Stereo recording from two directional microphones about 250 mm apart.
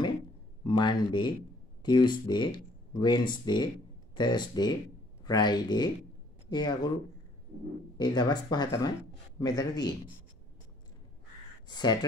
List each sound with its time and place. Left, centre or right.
0.7 s speech: centre
8.0 s speech: centre
11.6 s speech: centre